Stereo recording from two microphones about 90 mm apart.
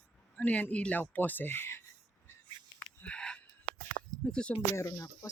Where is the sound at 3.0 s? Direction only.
10° left (ahead or behind).